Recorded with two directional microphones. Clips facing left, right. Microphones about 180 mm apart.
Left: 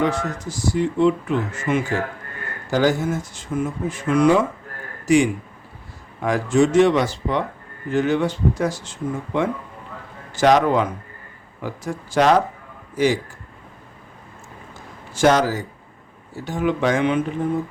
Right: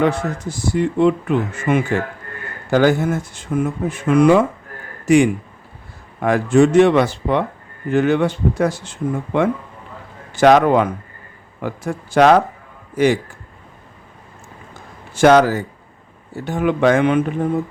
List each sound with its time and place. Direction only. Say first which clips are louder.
0.0 s speech: right 4 dB; 55° right (ahead or behind)
15.1 s speech: right 5 dB; 60° right (ahead or behind)